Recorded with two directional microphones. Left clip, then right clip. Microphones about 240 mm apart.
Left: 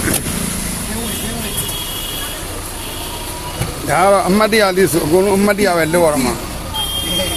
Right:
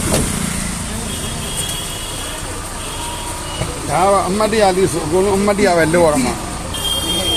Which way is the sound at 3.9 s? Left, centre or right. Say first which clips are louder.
Left 2 dB; left.